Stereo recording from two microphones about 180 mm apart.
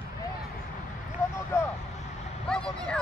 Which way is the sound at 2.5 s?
5° left (ahead or behind).